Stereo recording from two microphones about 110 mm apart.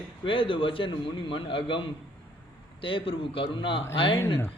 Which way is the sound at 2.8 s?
55° left (ahead or behind).